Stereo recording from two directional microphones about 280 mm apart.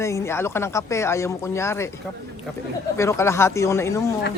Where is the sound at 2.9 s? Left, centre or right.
Centre.